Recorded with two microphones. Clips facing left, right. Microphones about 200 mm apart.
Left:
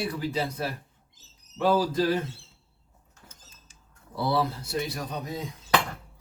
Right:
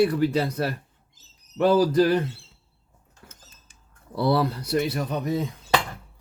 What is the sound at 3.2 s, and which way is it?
Rodents, 65° right (ahead or behind).